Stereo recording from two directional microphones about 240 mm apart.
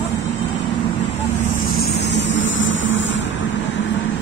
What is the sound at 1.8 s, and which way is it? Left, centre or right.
Vehicle, left.